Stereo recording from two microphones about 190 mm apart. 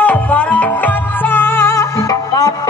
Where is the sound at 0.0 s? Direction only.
5° left (ahead or behind).